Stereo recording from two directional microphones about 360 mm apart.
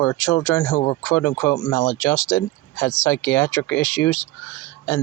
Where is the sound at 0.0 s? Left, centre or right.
Left.